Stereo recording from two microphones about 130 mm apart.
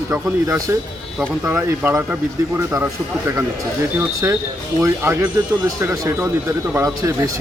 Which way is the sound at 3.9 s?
20° right (ahead or behind).